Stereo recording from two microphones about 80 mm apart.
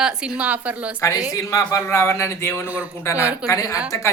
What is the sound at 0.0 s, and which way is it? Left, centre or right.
Speech, centre.